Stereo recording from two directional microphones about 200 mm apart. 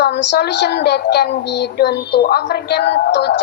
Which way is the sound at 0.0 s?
60° left (ahead or behind).